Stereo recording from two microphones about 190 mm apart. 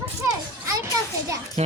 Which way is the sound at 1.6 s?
35° right (ahead or behind).